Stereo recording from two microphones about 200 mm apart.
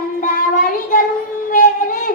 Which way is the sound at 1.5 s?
45° left (ahead or behind).